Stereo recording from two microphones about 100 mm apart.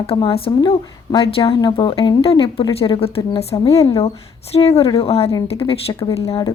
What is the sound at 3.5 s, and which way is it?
Speech, 45° left (ahead or behind).